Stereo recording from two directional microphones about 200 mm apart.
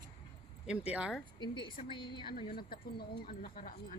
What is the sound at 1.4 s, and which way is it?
A woman's voice, 25° left (ahead or behind).